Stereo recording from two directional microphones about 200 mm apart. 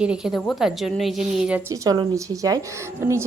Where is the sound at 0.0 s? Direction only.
5° right (ahead or behind).